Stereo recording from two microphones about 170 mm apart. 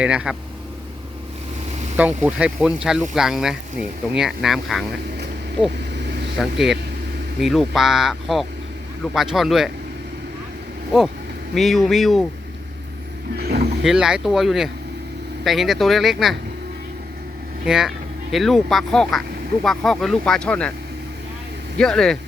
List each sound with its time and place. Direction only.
0.0 s speech: 5° right (ahead or behind)
2.0 s speech: 10° right (ahead or behind)
6.4 s speech: centre (ahead or behind)
11.5 s speech: centre (ahead or behind)
13.3 s vehicle: 65° right (ahead or behind)
13.8 s speech: 5° right (ahead or behind)
17.7 s speech: centre (ahead or behind)
21.8 s speech: 5° left (ahead or behind)